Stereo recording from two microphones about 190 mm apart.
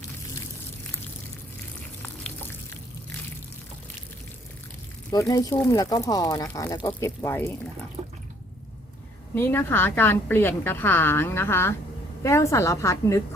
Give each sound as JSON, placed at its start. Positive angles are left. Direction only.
{"t": 5.1, "sound": "speech", "side_deg": 20}
{"t": 9.3, "sound": "a woman's voice", "side_deg": 10}